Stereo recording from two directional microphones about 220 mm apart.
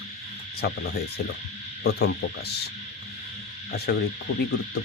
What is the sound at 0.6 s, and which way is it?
Speech, 45° left (ahead or behind).